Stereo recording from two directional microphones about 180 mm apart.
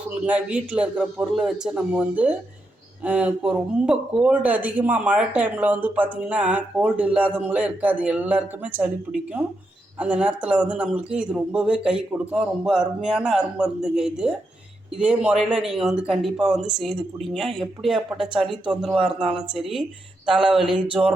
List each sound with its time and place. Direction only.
0.3 s speech: 5° right (ahead or behind)
10.0 s speech: 5° right (ahead or behind)